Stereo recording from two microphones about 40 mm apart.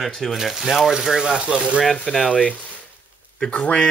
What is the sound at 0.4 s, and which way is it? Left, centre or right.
Speech, centre.